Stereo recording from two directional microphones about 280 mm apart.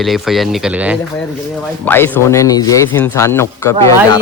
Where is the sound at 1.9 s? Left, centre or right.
Centre.